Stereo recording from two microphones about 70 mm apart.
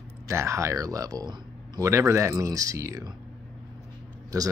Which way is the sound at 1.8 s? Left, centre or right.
Right.